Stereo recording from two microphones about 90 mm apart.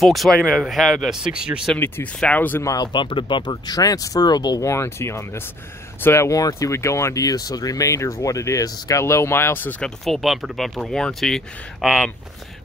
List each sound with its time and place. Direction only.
0.0 s speech: centre (ahead or behind)
2.1 s speech: 15° left (ahead or behind)
2.6 s speech: 40° left (ahead or behind)
2.9 s speech: 65° left (ahead or behind)
4.6 s speech: 30° left (ahead or behind)
9.8 s speech: 5° left (ahead or behind)